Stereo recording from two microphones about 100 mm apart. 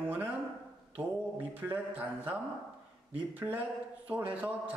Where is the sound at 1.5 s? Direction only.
20° right (ahead or behind).